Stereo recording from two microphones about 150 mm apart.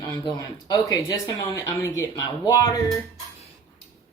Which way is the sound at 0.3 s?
25° left (ahead or behind).